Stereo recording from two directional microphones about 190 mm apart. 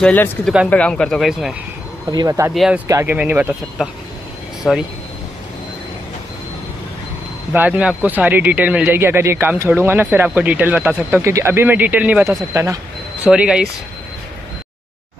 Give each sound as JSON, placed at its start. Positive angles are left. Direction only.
{"t": 0.0, "sound": "speech", "side_deg": 10}
{"t": 2.0, "sound": "speech", "side_deg": -20}
{"t": 2.5, "sound": "speech", "side_deg": 0}
{"t": 2.9, "sound": "speech", "side_deg": -10}
{"t": 7.5, "sound": "speech", "side_deg": -10}